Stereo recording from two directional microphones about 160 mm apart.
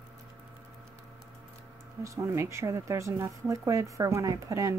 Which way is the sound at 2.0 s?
20° right (ahead or behind).